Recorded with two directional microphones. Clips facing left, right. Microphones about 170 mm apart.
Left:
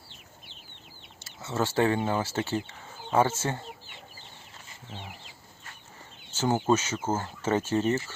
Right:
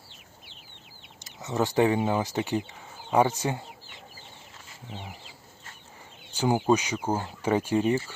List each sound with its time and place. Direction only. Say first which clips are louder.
1.2 s speech: right 2 dB; 15° right (ahead or behind)
4.9 s speech: right 2 dB; 15° right (ahead or behind)
6.3 s speech: right 2 dB; 15° right (ahead or behind)